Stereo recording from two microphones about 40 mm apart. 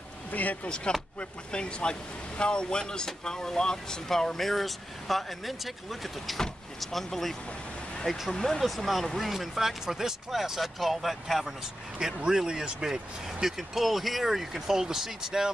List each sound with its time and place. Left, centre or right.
0.3 s speech: left
1.5 s speech: left; by 7.3 s centre
8.3 s speech: centre
8.5 s speech: centre
12.0 s speech: centre